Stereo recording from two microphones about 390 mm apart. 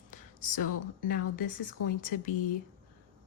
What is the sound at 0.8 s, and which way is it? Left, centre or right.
Speech, left.